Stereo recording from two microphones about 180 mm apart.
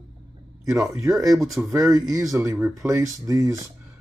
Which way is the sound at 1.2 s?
Centre (ahead or behind).